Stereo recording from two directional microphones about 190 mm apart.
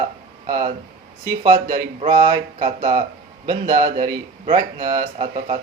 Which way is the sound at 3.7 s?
20° right (ahead or behind).